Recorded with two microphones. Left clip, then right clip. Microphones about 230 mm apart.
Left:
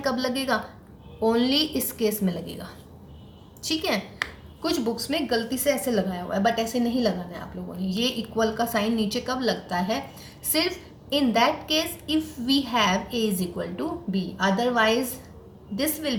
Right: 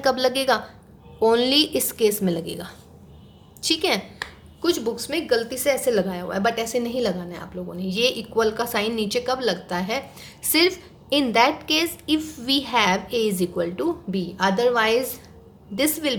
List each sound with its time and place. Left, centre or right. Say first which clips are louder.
0.0 s a woman's voice: right 6 dB; right